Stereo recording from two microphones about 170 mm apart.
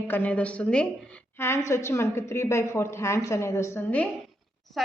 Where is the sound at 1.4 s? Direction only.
15° left (ahead or behind).